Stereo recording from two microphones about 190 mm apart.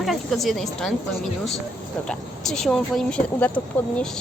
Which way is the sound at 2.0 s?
Centre (ahead or behind).